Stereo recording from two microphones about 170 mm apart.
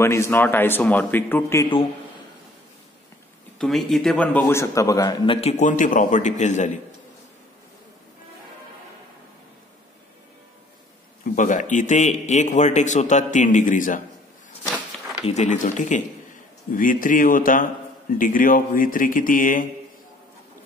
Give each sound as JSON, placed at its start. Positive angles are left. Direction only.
{"t": 0.0, "sound": "a man's voice", "side_deg": 15}
{"t": 3.5, "sound": "a man's voice", "side_deg": 0}
{"t": 11.3, "sound": "a man's voice", "side_deg": 45}
{"t": 15.2, "sound": "a man's voice", "side_deg": 45}